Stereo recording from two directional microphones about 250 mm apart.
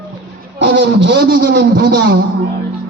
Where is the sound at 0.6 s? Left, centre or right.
Right.